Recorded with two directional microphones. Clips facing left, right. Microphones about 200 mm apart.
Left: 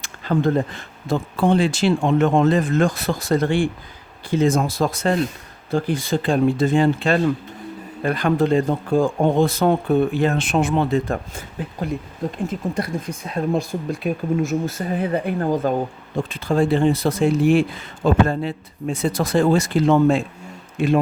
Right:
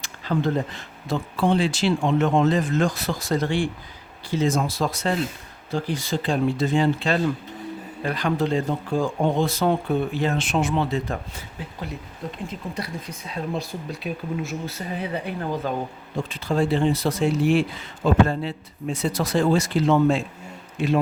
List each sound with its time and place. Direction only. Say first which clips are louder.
0.0 s speech: left 4 dB; 50° left (ahead or behind)